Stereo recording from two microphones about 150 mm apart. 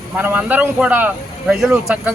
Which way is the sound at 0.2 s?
10° right (ahead or behind).